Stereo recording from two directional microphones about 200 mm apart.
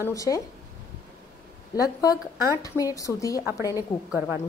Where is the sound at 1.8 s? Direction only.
15° left (ahead or behind).